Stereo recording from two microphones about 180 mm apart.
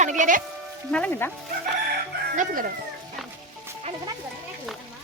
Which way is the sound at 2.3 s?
50° right (ahead or behind).